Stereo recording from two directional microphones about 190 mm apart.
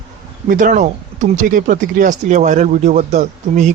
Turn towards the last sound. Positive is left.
turn(degrees=-35)  # may be behind; listen again after turning